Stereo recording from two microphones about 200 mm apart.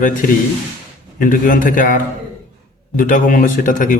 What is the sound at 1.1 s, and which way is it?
A man's voice, 40° left (ahead or behind).